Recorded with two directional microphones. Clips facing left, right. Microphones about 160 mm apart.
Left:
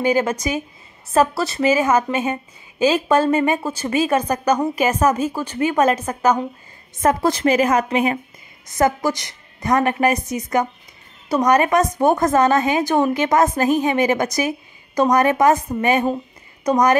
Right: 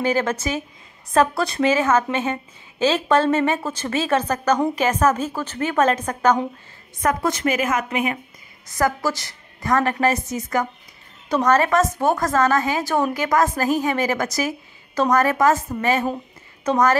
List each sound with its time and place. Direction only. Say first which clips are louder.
0.0 s a woman's voice: left 3 dB; 10° left (ahead or behind)
7.0 s a woman's voice: left 4 dB; 30° left (ahead or behind)
8.6 s a woman's voice: left 3 dB; 20° left (ahead or behind)